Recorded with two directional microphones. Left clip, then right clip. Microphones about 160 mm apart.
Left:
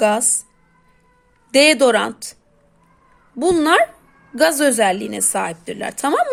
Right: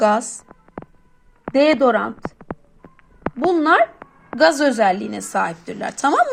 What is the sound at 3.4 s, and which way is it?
A woman's voice, 25° left (ahead or behind).